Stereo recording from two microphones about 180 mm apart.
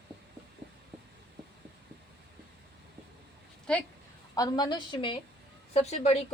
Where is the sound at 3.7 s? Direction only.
5° left (ahead or behind).